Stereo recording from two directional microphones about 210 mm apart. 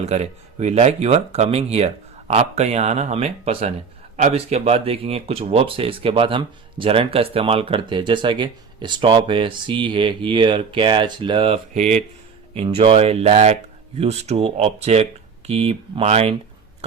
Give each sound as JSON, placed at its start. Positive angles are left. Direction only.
{"t": 0.0, "sound": "speech", "side_deg": -30}